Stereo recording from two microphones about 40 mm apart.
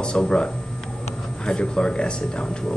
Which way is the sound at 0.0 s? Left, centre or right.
Left.